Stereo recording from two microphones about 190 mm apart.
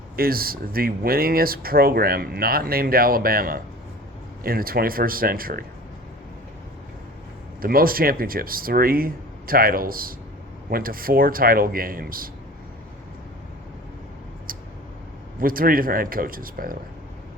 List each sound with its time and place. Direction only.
0.2 s speech: 50° right (ahead or behind)
7.6 s speech: 50° right (ahead or behind)
14.5 s a sound: 50° right (ahead or behind)
15.4 s speech: 50° right (ahead or behind)